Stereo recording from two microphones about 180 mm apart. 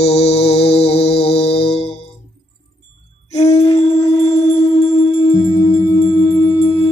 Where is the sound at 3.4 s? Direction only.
35° left (ahead or behind).